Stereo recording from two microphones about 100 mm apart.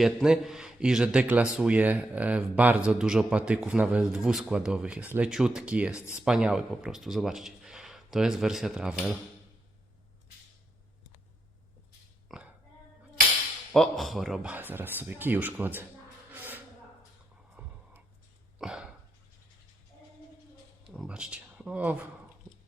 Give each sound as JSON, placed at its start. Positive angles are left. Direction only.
{"t": 0.0, "sound": "speech", "side_deg": -5}
{"t": 12.3, "sound": "a sound", "side_deg": -5}
{"t": 13.7, "sound": "speech", "side_deg": 0}
{"t": 14.4, "sound": "speech", "side_deg": -20}
{"t": 16.3, "sound": "a sound", "side_deg": -20}
{"t": 17.6, "sound": "wheeze", "side_deg": -15}
{"t": 18.6, "sound": "cough", "side_deg": -5}
{"t": 21.1, "sound": "speech", "side_deg": -10}